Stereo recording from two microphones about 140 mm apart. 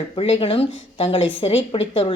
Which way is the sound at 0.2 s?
45° left (ahead or behind).